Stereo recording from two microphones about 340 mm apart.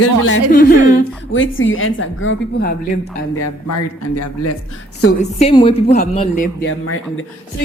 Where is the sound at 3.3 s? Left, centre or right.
Left.